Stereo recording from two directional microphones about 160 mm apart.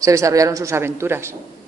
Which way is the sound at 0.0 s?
20° right (ahead or behind).